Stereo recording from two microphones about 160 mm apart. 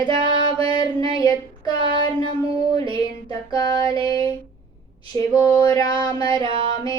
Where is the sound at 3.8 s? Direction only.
30° right (ahead or behind).